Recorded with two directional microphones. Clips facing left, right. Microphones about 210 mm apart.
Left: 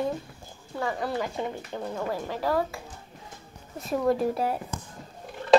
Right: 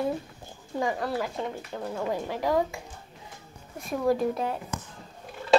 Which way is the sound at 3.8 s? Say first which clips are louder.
Left 1 dB; centre (ahead or behind).